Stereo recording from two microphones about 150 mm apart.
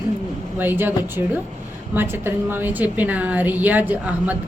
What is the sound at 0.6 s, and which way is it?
A woman's voice, 15° right (ahead or behind).